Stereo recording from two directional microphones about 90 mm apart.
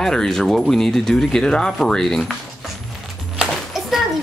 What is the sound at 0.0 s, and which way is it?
Speech, 5° left (ahead or behind).